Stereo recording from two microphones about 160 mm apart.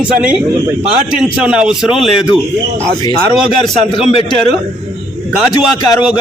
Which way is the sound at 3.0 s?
25° left (ahead or behind).